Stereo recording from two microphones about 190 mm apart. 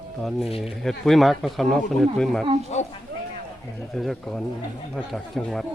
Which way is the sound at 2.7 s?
35° left (ahead or behind).